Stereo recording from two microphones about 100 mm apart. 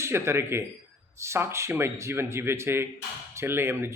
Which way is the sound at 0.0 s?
25° right (ahead or behind).